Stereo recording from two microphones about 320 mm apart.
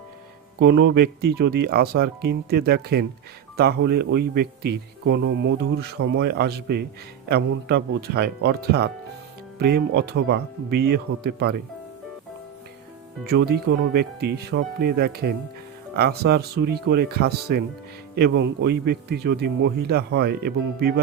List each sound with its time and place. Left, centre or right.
0.6 s speech: right
13.2 s speech: right